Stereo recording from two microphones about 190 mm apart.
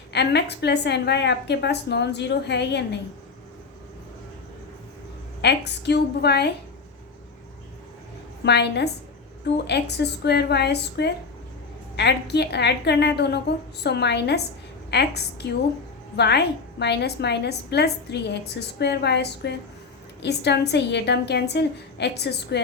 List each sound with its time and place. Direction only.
0.1 s a woman's voice: 60° left (ahead or behind)
5.4 s a woman's voice: 60° left (ahead or behind)
8.4 s a woman's voice: 60° left (ahead or behind)